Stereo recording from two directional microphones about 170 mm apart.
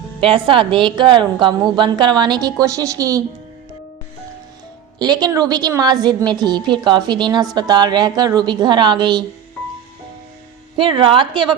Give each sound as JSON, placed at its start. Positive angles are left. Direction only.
{"t": 0.2, "sound": "a woman's voice", "side_deg": -30}
{"t": 4.9, "sound": "a woman's voice", "side_deg": -25}
{"t": 10.8, "sound": "a woman's voice", "side_deg": -30}